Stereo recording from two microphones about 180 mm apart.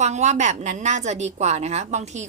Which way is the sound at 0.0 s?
40° right (ahead or behind).